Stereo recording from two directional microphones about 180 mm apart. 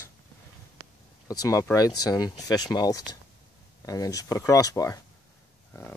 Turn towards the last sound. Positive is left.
turn(degrees=20)  # may be behind; listen again after turning